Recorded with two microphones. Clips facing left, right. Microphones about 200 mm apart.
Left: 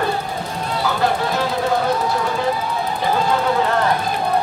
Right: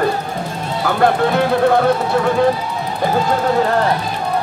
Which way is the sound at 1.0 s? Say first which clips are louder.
Right 8 dB; 60° right (ahead or behind).